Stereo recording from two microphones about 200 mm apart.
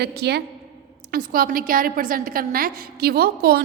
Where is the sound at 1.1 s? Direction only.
45° right (ahead or behind).